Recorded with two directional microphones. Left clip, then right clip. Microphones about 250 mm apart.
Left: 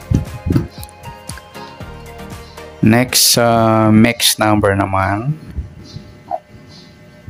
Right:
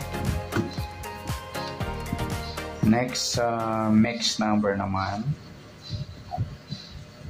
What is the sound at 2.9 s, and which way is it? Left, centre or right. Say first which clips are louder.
Speech: left 14 dB; left.